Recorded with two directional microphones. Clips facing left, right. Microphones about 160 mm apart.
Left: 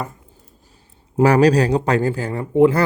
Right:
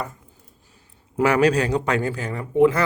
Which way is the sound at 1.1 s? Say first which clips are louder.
Left 4 dB; 35° left (ahead or behind).